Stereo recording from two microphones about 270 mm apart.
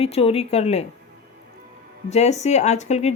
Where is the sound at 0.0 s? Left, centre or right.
Left.